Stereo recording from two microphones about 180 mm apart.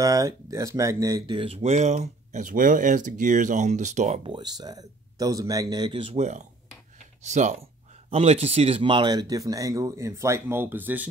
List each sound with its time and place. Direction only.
0.0 s speech: 20° right (ahead or behind); by 4.3 s 40° right (ahead or behind)
4.3 s speech: 20° right (ahead or behind)
7.2 s speech: 40° right (ahead or behind); by 11.1 s 10° right (ahead or behind)